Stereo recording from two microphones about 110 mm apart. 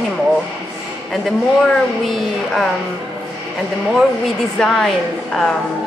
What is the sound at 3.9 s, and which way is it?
Speech, 5° left (ahead or behind).